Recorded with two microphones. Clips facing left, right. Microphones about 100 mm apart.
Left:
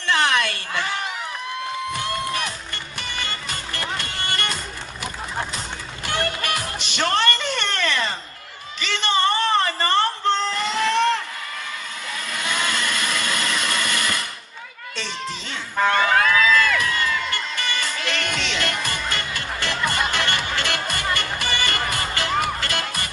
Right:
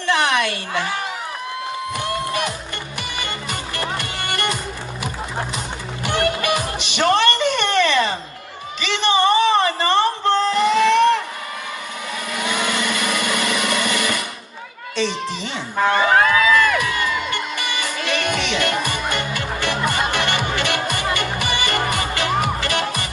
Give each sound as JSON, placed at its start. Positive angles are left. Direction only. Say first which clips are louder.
{"t": 0.0, "sound": "a sound", "louder": "right 2 dB", "side_deg": -15}
{"t": 3.0, "sound": "music", "louder": "right 2 dB", "side_deg": -15}
{"t": 6.1, "sound": "music", "louder": "right 5 dB", "side_deg": -15}
{"t": 12.3, "sound": "a sound", "louder": "right 3 dB", "side_deg": -15}
{"t": 15.8, "sound": "speech", "louder": "right 2 dB", "side_deg": -15}
{"t": 16.1, "sound": "crowd", "louder": "right 3 dB", "side_deg": -25}
{"t": 16.7, "sound": "music", "louder": "right 2 dB", "side_deg": -15}